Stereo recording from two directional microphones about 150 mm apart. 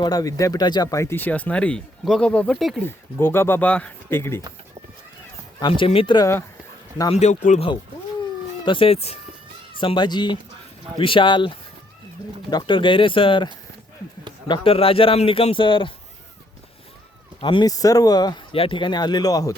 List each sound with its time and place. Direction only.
0.0 s speech: 25° left (ahead or behind); by 2.8 s centre (ahead or behind)
2.8 s speech: 15° left (ahead or behind)
5.5 s a man's voice: 30° left (ahead or behind)
7.1 s speech: 50° left (ahead or behind)
8.6 s a man's voice: 35° left (ahead or behind)
9.7 s a man's voice: 30° left (ahead or behind)
17.4 s speech: 30° left (ahead or behind)